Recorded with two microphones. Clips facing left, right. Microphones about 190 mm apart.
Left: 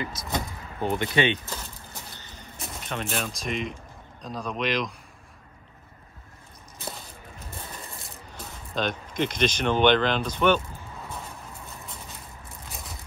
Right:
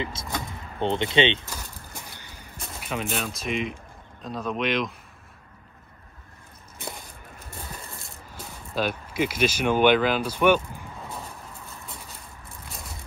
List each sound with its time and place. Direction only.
0.0 s speech: 25° right (ahead or behind)
2.0 s a sound: 10° right (ahead or behind)
4.2 s speech: centre (ahead or behind)
8.7 s speech: 5° right (ahead or behind)